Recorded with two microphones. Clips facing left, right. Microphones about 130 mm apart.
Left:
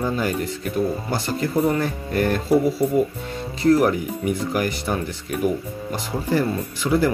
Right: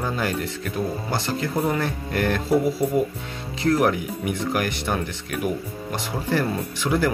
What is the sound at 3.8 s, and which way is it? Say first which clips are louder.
Speech: left 2 dB; 65° right (ahead or behind).